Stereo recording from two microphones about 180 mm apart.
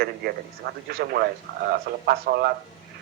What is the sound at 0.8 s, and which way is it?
A man's voice, 60° right (ahead or behind).